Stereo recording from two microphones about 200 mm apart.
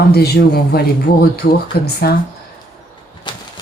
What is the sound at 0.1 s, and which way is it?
Speech, 50° left (ahead or behind).